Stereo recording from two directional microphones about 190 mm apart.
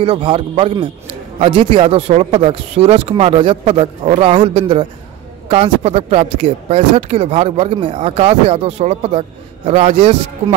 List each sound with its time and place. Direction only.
0.0 s a man's voice: 30° right (ahead or behind)